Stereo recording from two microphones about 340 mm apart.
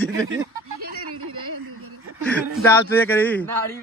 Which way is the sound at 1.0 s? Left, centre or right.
Right.